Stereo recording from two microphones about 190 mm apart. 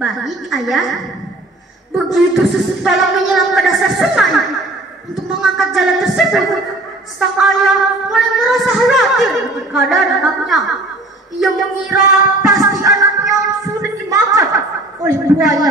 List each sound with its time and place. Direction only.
0.0 s singing: centre (ahead or behind)
2.1 s singing: centre (ahead or behind)
12.4 s music: 20° right (ahead or behind)
13.2 s music: centre (ahead or behind)
13.7 s a sound: 15° right (ahead or behind)
15.0 s a woman's voice: 15° right (ahead or behind)